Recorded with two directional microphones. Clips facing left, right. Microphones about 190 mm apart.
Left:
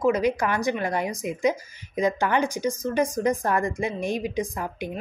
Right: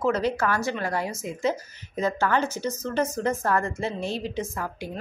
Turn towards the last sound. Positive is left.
turn(degrees=20)  # may be behind; listen again after turning